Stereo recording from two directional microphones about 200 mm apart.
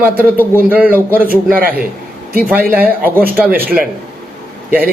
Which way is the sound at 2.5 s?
10° right (ahead or behind).